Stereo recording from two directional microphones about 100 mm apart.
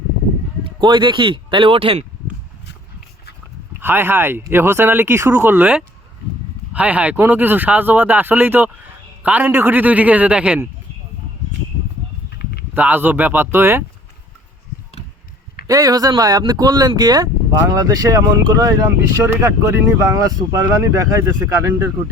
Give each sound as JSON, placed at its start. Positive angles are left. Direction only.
{"t": 0.6, "sound": "speech", "side_deg": -50}
{"t": 3.8, "sound": "speech", "side_deg": -20}
{"t": 12.7, "sound": "speech", "side_deg": -20}
{"t": 15.6, "sound": "speech", "side_deg": -35}